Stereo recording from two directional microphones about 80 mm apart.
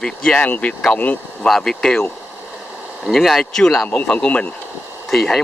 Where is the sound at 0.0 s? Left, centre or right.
Centre.